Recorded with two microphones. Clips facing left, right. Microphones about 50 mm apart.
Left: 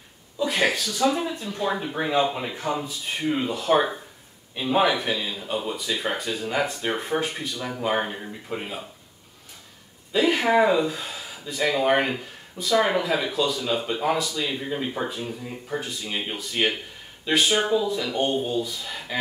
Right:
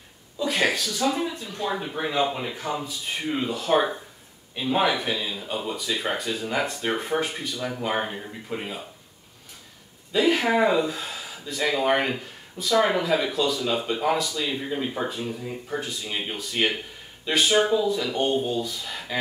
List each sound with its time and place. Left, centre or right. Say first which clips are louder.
0.4 s speech: left 1 dB; centre
3.2 s speech: left 2 dB; centre
10.1 s speech: left 1 dB; centre